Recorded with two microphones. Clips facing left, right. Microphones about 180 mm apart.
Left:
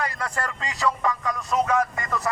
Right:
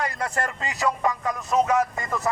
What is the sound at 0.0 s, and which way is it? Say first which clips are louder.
A man's voice: right 2 dB; 25° right (ahead or behind).